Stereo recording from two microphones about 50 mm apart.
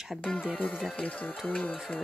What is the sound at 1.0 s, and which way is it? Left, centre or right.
Speech, left.